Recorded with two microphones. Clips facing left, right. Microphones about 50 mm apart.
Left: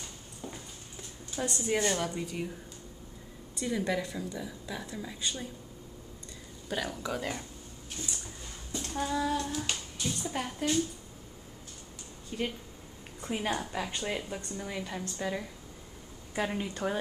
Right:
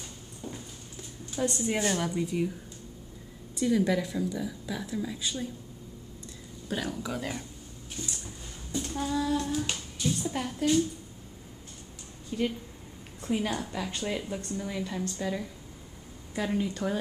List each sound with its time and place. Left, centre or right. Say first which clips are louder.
1.3 s a woman's voice: right 2 dB; centre
3.6 s a woman's voice: right 5 dB; centre
6.7 s a woman's voice: right 1 dB; centre
8.0 s a sound: right 1 dB; centre
8.7 s child singing: right 2 dB; centre
9.6 s a sound: right 3 dB; centre
10.2 s a woman's voice: right 1 dB; centre
12.3 s a woman's voice: right 4 dB; centre